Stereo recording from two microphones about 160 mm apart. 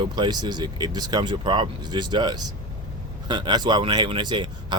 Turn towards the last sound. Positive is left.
turn(degrees=-30)  # may be behind; listen again after turning